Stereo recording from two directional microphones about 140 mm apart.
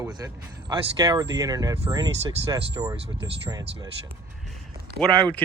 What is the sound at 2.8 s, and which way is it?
Speech, 25° right (ahead or behind).